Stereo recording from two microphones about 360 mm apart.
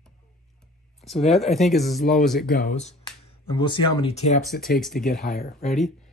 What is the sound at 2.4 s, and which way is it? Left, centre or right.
Speech, left.